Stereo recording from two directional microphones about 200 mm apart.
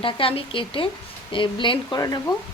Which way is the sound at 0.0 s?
25° left (ahead or behind).